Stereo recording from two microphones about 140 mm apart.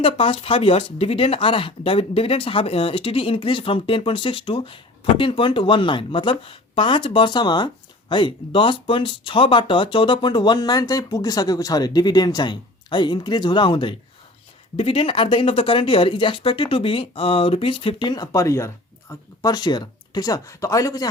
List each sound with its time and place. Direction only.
0.0 s speech: 40° left (ahead or behind); by 21.1 s 25° left (ahead or behind)